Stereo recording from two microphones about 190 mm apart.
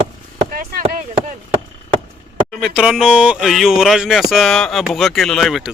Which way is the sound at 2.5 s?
Centre (ahead or behind).